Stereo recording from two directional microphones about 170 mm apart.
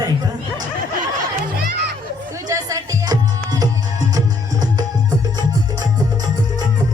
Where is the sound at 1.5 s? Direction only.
65° right (ahead or behind).